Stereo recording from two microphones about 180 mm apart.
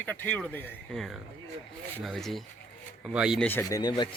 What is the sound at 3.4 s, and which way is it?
Speech, 10° left (ahead or behind).